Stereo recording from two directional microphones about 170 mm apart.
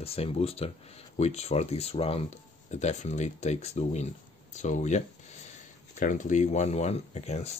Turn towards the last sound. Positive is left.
turn(degrees=40)  # may be behind; listen again after turning